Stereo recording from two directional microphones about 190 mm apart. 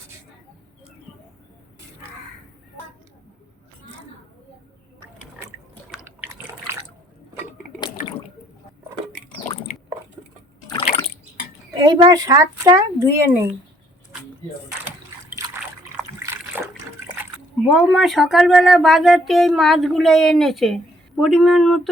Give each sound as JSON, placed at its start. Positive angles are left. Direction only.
{"t": 6.1, "sound": "water", "side_deg": -10}
{"t": 11.8, "sound": "speech", "side_deg": -25}
{"t": 17.7, "sound": "speech", "side_deg": 0}